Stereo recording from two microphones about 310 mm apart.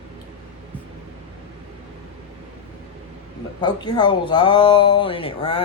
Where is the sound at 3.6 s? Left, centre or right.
Centre.